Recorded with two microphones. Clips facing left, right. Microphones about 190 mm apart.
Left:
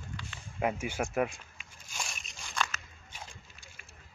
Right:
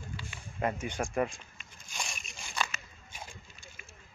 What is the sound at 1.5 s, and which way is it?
Biting, 5° left (ahead or behind).